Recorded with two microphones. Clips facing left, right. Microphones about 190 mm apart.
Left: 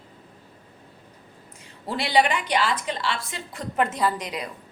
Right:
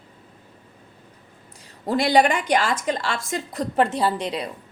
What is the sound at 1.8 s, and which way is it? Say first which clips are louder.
A woman's voice: right 4 dB; 45° right (ahead or behind).